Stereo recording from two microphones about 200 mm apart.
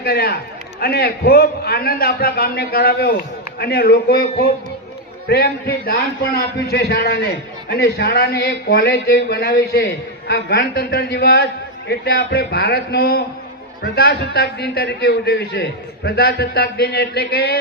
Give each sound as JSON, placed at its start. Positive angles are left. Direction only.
{"t": 0.0, "sound": "speech", "side_deg": 50}